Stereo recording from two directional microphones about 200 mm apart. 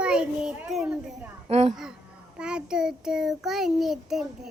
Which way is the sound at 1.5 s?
30° right (ahead or behind).